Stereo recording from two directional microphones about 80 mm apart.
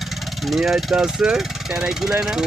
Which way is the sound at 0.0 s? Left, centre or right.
Centre.